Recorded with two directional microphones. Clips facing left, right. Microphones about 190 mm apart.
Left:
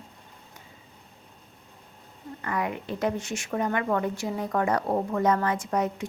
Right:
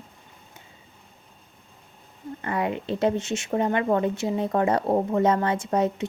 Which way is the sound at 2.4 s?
25° right (ahead or behind).